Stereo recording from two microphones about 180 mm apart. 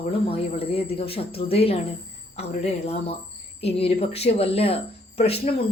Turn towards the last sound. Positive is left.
turn(degrees=35)  # may be behind; listen again after turning